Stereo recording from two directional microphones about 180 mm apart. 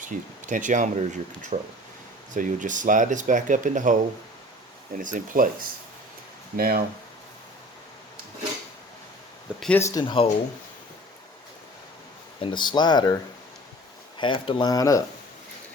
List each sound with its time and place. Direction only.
0.0 s speech: 45° right (ahead or behind)
4.9 s speech: 50° right (ahead or behind)
9.6 s speech: 5° left (ahead or behind)
9.8 s speech: 25° left (ahead or behind)
12.4 s speech: 25° left (ahead or behind)
14.2 s speech: 30° left (ahead or behind)